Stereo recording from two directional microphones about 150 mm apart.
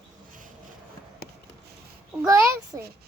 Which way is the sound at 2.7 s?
20° right (ahead or behind).